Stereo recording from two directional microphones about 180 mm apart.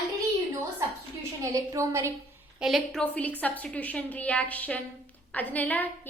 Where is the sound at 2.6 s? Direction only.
Centre (ahead or behind).